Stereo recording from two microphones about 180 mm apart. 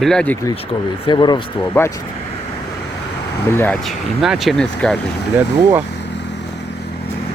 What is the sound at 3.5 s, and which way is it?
Speech, 15° left (ahead or behind).